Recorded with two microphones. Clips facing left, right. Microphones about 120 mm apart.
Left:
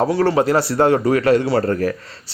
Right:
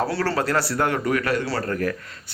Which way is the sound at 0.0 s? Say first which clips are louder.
Left 7 dB; 20° left (ahead or behind).